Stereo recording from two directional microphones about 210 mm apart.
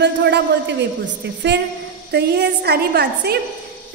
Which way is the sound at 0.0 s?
55° right (ahead or behind).